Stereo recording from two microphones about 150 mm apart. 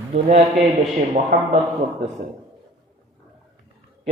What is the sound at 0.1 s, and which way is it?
A man's voice, 50° right (ahead or behind).